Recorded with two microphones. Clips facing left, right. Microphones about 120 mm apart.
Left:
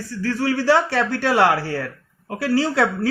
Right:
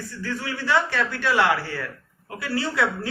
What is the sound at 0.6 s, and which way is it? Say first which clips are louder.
Speech: left 4 dB; 75° left (ahead or behind).